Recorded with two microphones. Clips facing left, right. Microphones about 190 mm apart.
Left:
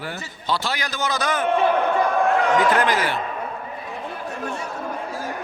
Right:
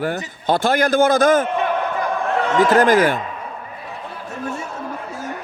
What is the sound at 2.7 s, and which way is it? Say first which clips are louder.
Speech: right 7 dB; 45° right (ahead or behind).